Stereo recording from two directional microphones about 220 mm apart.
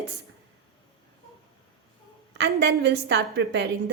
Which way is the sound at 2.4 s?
50° right (ahead or behind).